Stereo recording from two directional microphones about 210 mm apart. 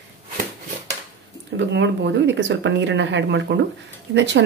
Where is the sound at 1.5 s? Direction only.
55° right (ahead or behind).